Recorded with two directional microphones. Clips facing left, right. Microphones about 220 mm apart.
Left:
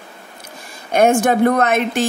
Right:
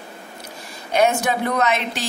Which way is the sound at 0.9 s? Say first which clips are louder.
Left 5 dB; 50° left (ahead or behind).